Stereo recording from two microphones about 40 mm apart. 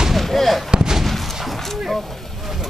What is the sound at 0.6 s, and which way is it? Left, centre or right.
Artillery fire, centre.